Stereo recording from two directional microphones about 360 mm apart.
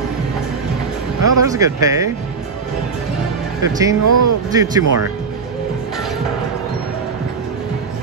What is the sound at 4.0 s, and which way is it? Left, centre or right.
Speech, right.